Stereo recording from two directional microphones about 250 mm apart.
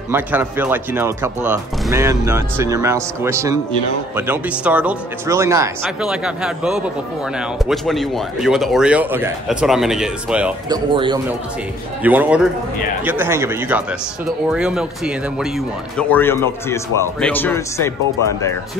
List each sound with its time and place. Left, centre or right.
0.1 s speech: centre
10.7 s speech: centre
12.0 s speech: centre